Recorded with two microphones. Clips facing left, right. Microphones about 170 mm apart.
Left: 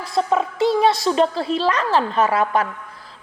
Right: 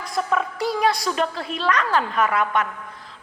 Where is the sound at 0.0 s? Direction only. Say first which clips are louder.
Left 4 dB; 30° left (ahead or behind).